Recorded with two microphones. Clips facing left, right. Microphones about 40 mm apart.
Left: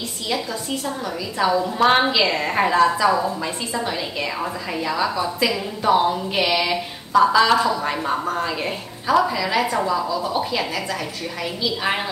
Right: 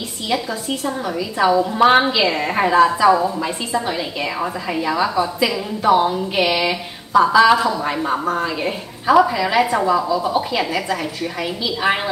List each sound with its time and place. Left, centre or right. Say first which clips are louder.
0.3 s a woman's voice: right 3 dB; centre
9.0 s a woman's voice: right 5 dB; centre